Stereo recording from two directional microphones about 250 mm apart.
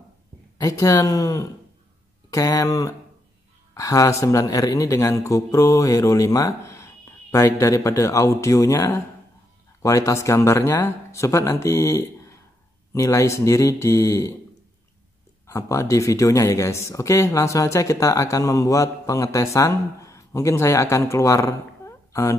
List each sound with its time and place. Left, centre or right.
0.6 s speech: centre
15.4 s speech: centre